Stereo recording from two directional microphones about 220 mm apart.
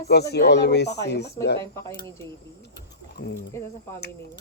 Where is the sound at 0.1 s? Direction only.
50° left (ahead or behind).